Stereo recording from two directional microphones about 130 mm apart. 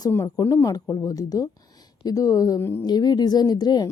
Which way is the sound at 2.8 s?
30° left (ahead or behind).